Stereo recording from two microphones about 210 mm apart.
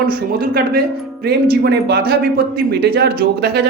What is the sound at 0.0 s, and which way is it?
Speech, 45° right (ahead or behind).